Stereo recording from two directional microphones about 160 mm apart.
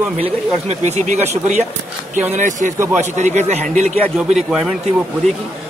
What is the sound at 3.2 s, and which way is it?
Speech, 45° right (ahead or behind).